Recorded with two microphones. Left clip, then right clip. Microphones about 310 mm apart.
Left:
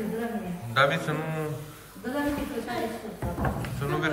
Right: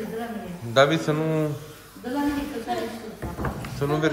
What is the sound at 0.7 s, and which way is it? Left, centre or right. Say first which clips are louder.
Speech: right 5 dB; centre.